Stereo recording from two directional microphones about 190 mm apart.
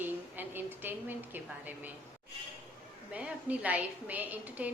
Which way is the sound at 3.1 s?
5° right (ahead or behind).